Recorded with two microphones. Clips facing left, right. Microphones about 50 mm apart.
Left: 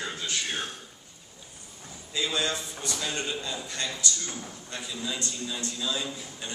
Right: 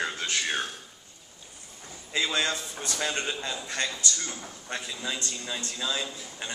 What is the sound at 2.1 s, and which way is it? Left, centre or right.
A man's voice, right.